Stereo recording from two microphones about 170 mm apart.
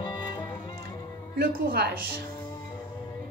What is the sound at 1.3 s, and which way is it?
Music, 65° right (ahead or behind).